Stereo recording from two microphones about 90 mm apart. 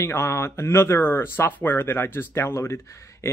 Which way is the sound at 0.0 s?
30° left (ahead or behind).